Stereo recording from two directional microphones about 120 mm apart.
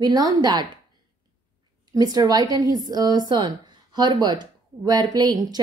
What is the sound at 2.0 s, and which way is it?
A woman's voice, 30° right (ahead or behind).